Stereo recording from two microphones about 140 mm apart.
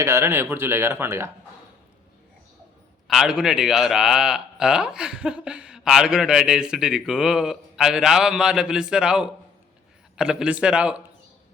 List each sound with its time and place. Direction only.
0.0 s speech: 20° right (ahead or behind)
3.1 s a man's voice: 5° right (ahead or behind)